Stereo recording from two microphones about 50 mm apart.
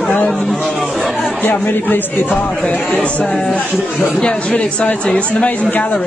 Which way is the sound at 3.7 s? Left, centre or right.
Centre.